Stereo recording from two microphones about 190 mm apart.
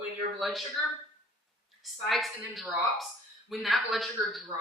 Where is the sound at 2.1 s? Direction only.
Centre (ahead or behind).